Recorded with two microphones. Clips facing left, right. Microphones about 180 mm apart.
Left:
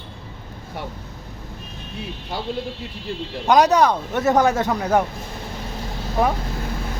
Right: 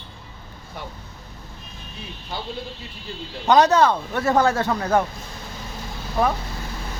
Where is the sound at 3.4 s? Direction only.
10° left (ahead or behind).